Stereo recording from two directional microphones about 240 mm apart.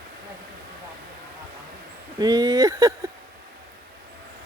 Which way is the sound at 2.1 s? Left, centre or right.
Centre.